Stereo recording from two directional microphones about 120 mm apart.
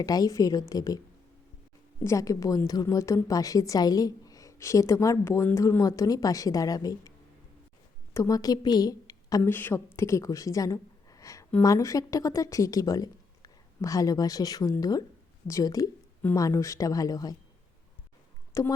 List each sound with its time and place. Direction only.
0.0 s a woman's voice: 30° left (ahead or behind)
2.0 s a woman's voice: 25° left (ahead or behind)
8.1 s a woman's voice: 30° left (ahead or behind)
9.4 s a woman's voice: 15° left (ahead or behind)
18.5 s a woman's voice: 25° left (ahead or behind)